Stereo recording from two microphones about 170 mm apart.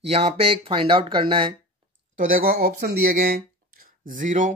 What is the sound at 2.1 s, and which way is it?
Speech, 55° right (ahead or behind).